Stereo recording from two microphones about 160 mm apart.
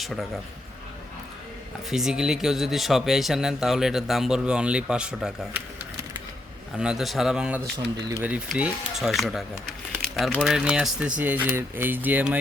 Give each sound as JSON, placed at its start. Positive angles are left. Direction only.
{"t": 0.0, "sound": "speech", "side_deg": 0}
{"t": 1.9, "sound": "speech", "side_deg": -5}
{"t": 6.7, "sound": "speech", "side_deg": -5}
{"t": 7.6, "sound": "speech", "side_deg": -20}